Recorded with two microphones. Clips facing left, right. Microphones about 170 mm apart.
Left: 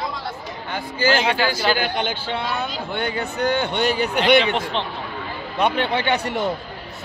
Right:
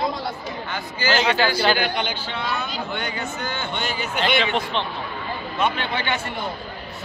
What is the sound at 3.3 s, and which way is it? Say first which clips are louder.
Speech: left 8 dB; 65° left (ahead or behind).